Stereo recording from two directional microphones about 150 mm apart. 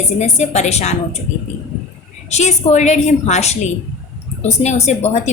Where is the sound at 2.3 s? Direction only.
50° left (ahead or behind).